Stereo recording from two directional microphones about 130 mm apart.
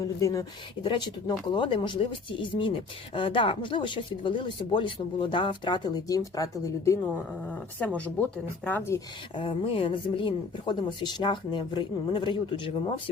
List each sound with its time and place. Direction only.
0.0 s speech: 25° left (ahead or behind)
1.5 s speech: 40° left (ahead or behind)
7.4 s speech: 10° left (ahead or behind)
9.3 s speech: 40° left (ahead or behind)